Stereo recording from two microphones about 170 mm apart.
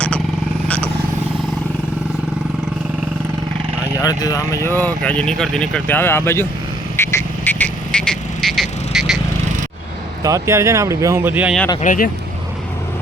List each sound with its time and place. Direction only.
4.0 s speech: 20° left (ahead or behind)
4.9 s speech: 10° left (ahead or behind)
6.9 s frog: 15° left (ahead or behind); by 9.1 s centre (ahead or behind)
10.2 s speech: 20° right (ahead or behind)
11.8 s speech: 50° left (ahead or behind)